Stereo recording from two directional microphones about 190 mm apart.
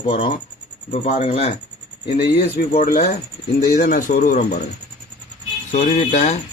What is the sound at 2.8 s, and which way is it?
Speech, 50° left (ahead or behind).